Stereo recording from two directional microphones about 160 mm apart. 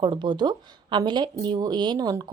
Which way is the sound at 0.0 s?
30° right (ahead or behind).